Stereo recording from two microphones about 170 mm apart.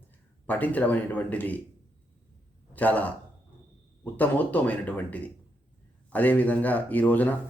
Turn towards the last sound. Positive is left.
turn(degrees=10)  # may be behind; listen again after turning